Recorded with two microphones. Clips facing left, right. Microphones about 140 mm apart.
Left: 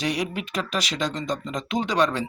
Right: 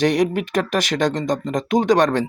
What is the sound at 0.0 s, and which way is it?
Speech, 50° right (ahead or behind).